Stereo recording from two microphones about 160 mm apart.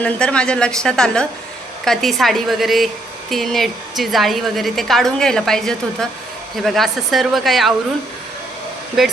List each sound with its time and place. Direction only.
0.0 s a woman's voice: 5° left (ahead or behind)
9.0 s a woman's voice: centre (ahead or behind)